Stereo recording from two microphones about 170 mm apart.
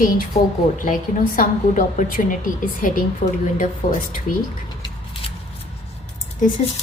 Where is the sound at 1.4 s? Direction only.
50° left (ahead or behind).